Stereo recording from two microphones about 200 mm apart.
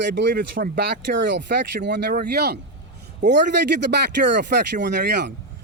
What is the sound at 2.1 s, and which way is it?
Speech, 50° right (ahead or behind).